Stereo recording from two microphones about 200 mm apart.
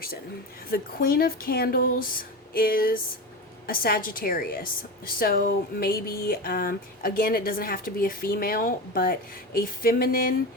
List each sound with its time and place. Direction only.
0.7 s speech: 45° left (ahead or behind)